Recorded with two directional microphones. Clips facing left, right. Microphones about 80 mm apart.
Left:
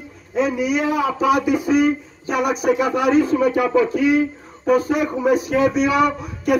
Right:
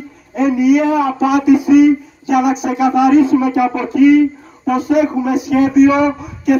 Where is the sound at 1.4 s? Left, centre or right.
Left.